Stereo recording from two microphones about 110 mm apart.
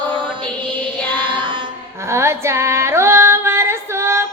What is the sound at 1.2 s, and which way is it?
Music, 45° right (ahead or behind).